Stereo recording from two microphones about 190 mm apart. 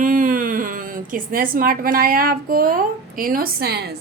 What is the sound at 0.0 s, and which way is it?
A woman's voice, 45° right (ahead or behind).